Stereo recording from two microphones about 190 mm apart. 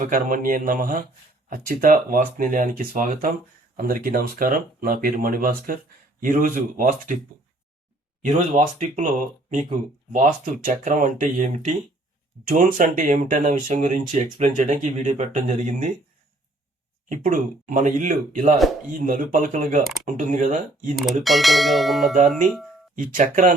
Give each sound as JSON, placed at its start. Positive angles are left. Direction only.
{"t": 0.0, "sound": "speech", "side_deg": -45}
{"t": 8.2, "sound": "speech", "side_deg": -40}
{"t": 17.1, "sound": "speech", "side_deg": -45}
{"t": 21.2, "sound": "bell", "side_deg": 0}
{"t": 23.0, "sound": "speech", "side_deg": -45}